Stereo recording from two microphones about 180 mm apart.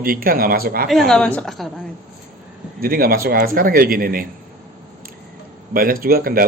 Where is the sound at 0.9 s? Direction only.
Centre (ahead or behind).